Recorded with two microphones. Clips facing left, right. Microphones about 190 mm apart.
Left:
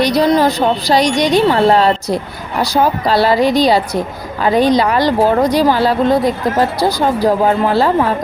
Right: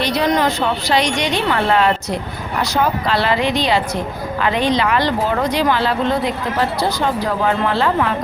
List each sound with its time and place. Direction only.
0.0 s speech: 35° left (ahead or behind)